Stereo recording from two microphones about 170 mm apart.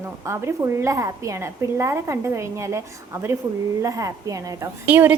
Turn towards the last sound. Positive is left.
turn(degrees=-10)  # may be behind; listen again after turning